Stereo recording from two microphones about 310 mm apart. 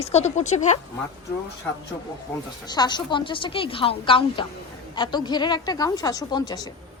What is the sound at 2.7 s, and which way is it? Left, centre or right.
A woman's voice, centre.